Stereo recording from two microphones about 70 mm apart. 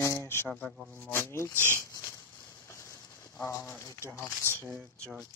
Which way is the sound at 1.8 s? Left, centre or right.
Left.